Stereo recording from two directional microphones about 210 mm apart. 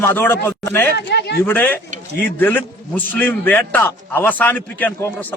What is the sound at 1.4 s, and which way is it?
A man's voice, 10° left (ahead or behind).